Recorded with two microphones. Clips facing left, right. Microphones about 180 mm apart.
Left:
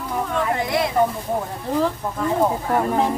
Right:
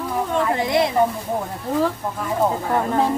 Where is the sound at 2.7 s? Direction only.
5° left (ahead or behind).